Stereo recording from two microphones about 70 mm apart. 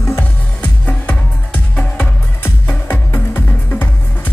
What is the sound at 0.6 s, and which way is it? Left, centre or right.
Music, left.